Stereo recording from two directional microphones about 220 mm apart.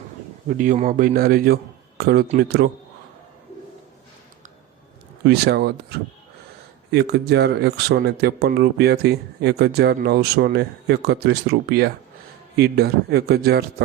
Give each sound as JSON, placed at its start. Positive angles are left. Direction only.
{"t": 0.6, "sound": "a man's voice", "side_deg": -35}
{"t": 5.2, "sound": "speech", "side_deg": -50}